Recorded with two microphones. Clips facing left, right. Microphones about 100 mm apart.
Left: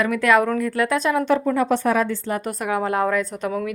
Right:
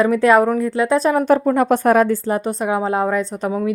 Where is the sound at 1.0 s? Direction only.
40° right (ahead or behind).